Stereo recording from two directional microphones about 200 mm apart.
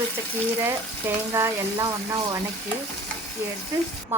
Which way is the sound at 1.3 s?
15° right (ahead or behind).